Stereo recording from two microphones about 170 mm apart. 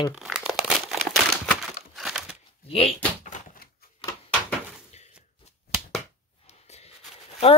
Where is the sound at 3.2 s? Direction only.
45° left (ahead or behind).